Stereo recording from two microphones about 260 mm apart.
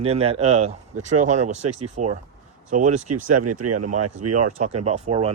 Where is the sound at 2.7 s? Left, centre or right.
Right.